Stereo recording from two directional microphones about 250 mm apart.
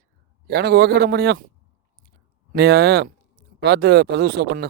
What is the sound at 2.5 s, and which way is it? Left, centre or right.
A man's voice, right.